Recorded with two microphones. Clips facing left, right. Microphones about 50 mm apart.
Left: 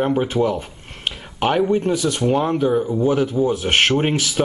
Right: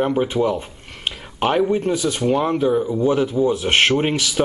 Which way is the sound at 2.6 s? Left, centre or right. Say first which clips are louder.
Even; centre.